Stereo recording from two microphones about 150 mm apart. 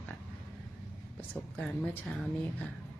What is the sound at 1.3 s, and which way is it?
Speech, 5° left (ahead or behind).